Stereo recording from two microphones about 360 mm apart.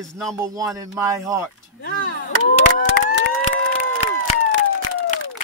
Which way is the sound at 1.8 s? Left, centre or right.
Left.